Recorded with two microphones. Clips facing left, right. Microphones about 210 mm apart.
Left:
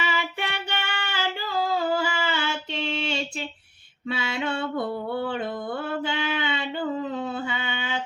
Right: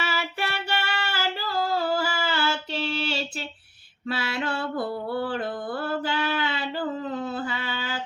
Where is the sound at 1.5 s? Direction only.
15° left (ahead or behind).